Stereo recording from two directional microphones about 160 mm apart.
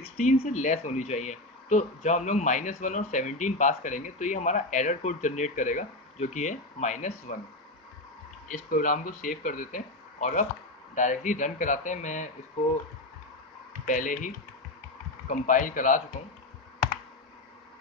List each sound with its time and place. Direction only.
0.0 s speech: 45° left (ahead or behind)
8.5 s speech: 55° left (ahead or behind)
13.8 s speech: 55° left (ahead or behind)